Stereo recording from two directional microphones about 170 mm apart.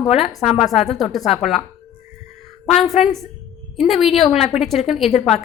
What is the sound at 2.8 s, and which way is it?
A woman's voice, centre (ahead or behind).